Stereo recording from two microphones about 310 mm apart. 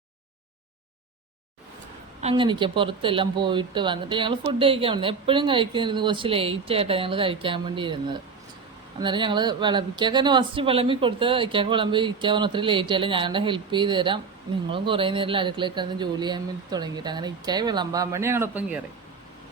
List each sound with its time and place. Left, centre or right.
2.2 s speech: centre